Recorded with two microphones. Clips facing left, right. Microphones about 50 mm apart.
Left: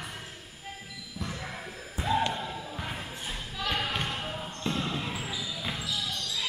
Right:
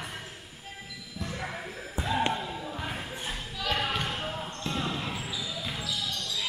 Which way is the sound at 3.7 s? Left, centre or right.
Centre.